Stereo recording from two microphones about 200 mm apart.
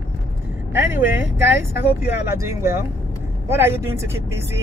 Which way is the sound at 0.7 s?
10° right (ahead or behind).